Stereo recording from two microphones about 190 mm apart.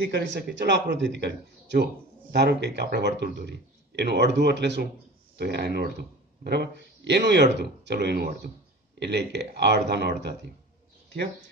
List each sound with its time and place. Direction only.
0.0 s speech: 60° right (ahead or behind)